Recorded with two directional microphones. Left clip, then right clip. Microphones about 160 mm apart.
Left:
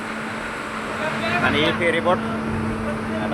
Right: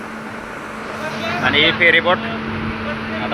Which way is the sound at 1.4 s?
Centre (ahead or behind).